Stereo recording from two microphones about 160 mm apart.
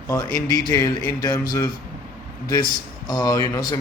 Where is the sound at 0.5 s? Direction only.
20° left (ahead or behind).